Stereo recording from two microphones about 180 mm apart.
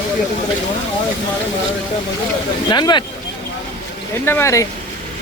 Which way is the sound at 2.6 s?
25° left (ahead or behind).